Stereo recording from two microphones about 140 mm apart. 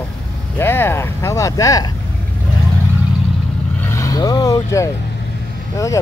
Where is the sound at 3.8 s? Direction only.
25° left (ahead or behind).